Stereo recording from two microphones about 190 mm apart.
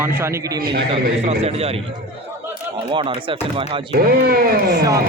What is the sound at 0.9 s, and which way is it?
Speech, 35° right (ahead or behind).